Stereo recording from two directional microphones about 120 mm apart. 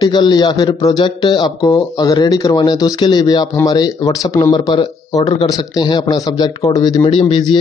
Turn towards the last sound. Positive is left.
turn(degrees=40)  # may be behind; listen again after turning